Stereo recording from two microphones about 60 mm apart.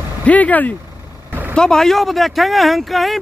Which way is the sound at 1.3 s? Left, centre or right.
Right.